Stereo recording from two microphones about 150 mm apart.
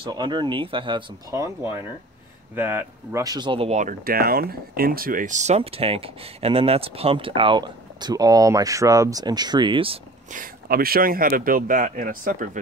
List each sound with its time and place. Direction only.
0.0 s speech: 30° right (ahead or behind)
1.3 s speech: 20° right (ahead or behind); by 3.7 s 35° right (ahead or behind)
3.7 s speech: 65° right (ahead or behind); by 9.9 s 35° right (ahead or behind)
10.3 s speech: 80° right